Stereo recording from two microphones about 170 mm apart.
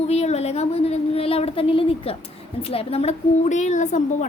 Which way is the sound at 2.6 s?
35° left (ahead or behind).